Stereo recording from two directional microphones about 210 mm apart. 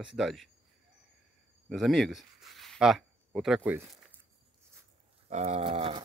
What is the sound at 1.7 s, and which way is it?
Speech, centre (ahead or behind).